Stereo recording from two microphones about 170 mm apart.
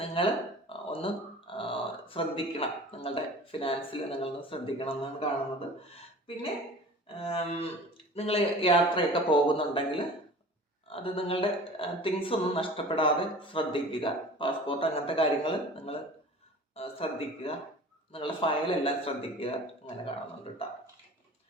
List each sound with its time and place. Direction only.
0.0 s a sound: 35° left (ahead or behind)
0.7 s speech: 30° left (ahead or behind)
7.2 s speech: 35° left (ahead or behind)